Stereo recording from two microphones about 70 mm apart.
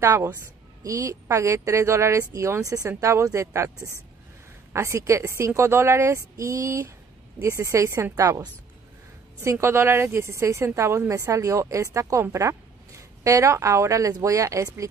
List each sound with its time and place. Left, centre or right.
0.0 s a woman's voice: right
4.7 s a woman's voice: right
9.4 s a woman's voice: right